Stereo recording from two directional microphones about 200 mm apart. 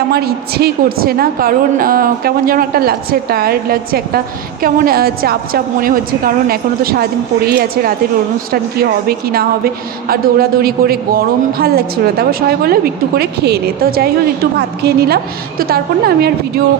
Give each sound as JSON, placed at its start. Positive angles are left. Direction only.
{"t": 0.1, "sound": "a woman's voice", "side_deg": -50}